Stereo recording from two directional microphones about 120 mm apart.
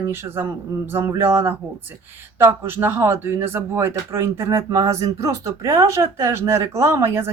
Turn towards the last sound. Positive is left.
turn(degrees=-20)  # may be behind; listen again after turning